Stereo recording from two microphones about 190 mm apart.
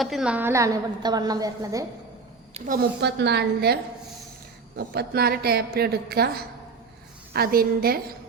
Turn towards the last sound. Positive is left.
turn(degrees=-50)  # may be behind; listen again after turning